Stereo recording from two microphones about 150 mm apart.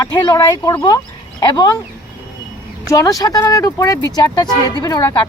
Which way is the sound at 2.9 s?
25° left (ahead or behind).